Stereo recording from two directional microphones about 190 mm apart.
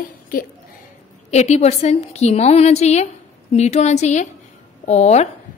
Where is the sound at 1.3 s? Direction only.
35° left (ahead or behind).